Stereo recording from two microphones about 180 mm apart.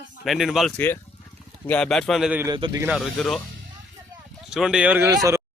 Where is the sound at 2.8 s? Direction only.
Centre (ahead or behind).